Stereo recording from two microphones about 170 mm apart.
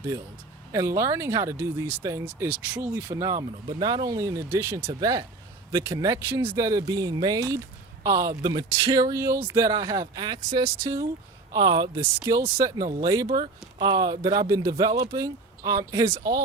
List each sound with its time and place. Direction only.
0.7 s speech: 20° right (ahead or behind)
13.2 s speech: 30° right (ahead or behind)